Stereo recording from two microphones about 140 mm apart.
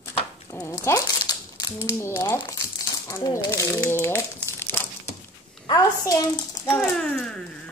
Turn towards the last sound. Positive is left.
turn(degrees=5)  # may be behind; listen again after turning